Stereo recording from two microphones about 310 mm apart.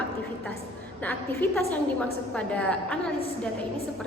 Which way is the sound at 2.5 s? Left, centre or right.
Centre.